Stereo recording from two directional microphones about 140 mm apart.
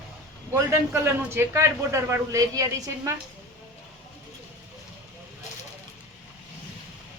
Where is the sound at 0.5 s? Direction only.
15° right (ahead or behind).